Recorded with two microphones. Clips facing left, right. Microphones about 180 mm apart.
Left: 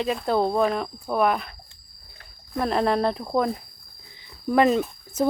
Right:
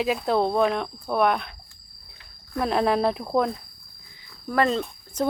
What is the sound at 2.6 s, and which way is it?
Speech, centre (ahead or behind).